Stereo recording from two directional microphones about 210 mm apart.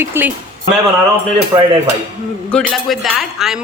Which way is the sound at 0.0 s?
10° right (ahead or behind).